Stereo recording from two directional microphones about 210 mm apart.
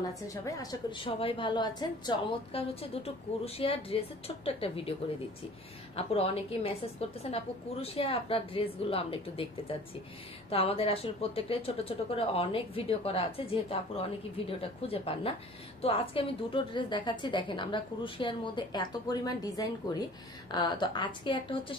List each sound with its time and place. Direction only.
0.3 s speech: 15° left (ahead or behind)
5.9 s speech: 30° left (ahead or behind)